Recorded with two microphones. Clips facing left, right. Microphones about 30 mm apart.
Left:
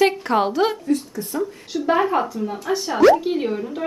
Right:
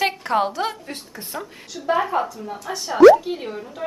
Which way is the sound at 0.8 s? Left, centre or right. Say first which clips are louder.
Left 12 dB; right.